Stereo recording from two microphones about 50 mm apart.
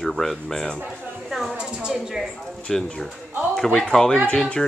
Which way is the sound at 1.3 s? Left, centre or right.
Centre.